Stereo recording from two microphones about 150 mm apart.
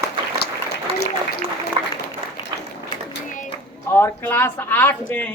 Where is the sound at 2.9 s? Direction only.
35° left (ahead or behind).